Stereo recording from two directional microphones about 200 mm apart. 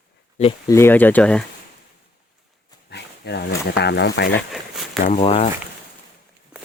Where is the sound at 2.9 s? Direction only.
55° left (ahead or behind).